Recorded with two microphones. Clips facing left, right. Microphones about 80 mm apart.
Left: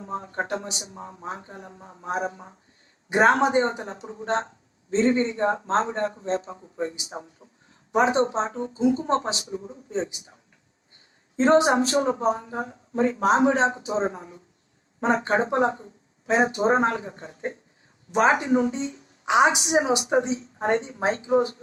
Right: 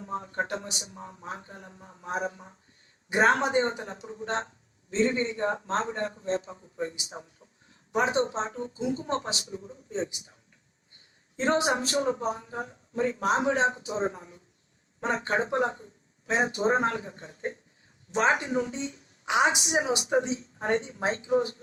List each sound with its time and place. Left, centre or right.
0.0 s speech: left
19.2 s a woman's voice: left